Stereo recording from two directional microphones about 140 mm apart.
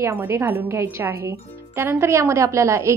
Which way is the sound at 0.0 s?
15° right (ahead or behind).